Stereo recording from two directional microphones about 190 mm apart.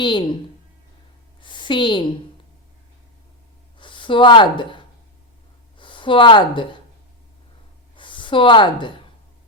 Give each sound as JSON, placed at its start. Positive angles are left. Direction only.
{"t": 0.0, "sound": "a woman's voice", "side_deg": 25}
{"t": 1.4, "sound": "a sound", "side_deg": 25}
{"t": 3.8, "sound": "speech", "side_deg": 25}
{"t": 7.9, "sound": "a woman's voice", "side_deg": 25}